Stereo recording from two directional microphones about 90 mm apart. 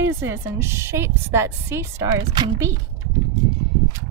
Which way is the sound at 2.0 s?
55° right (ahead or behind).